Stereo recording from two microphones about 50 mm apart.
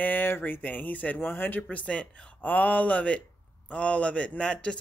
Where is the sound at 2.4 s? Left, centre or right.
Left.